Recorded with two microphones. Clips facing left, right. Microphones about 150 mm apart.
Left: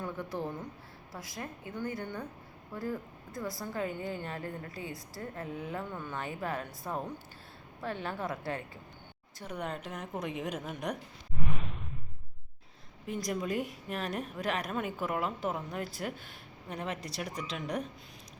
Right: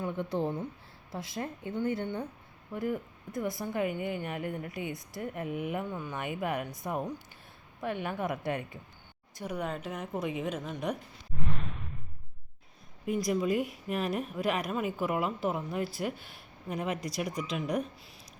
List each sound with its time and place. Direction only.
0.0 s a woman's voice: 25° right (ahead or behind)
9.4 s a woman's voice: 5° right (ahead or behind)
11.4 s a sound: 5° left (ahead or behind)
13.1 s a woman's voice: 10° right (ahead or behind)